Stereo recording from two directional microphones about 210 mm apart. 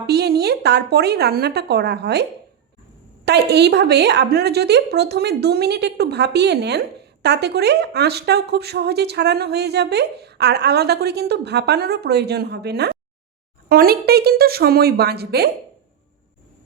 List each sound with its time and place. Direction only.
0.1 s a woman's voice: 50° right (ahead or behind)
3.2 s a woman's voice: 50° right (ahead or behind)